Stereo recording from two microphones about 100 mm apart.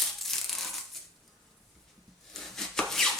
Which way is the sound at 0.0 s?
5° left (ahead or behind).